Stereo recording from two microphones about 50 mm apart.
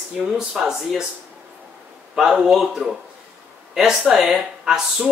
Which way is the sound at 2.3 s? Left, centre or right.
Centre.